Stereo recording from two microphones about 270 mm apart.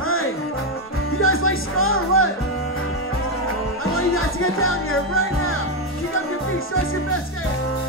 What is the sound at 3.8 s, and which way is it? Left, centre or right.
Music, left.